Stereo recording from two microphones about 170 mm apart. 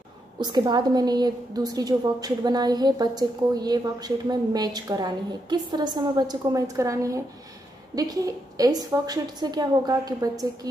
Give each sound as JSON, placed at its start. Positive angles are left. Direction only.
{"t": 0.4, "sound": "a woman's voice", "side_deg": -25}